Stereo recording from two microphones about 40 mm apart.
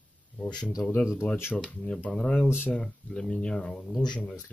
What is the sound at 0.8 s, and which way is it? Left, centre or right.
Speech, left.